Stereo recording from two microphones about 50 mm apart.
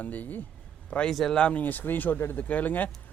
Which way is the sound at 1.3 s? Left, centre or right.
Left.